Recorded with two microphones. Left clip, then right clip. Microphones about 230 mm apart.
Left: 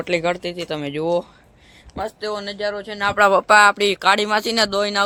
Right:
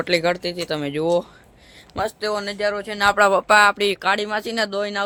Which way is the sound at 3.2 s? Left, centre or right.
Centre.